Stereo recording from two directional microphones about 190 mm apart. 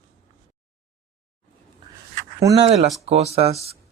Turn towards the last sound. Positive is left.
turn(degrees=-35)  # may be behind; listen again after turning